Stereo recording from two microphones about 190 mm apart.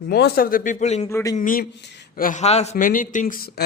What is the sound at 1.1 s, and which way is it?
Speech, 15° left (ahead or behind).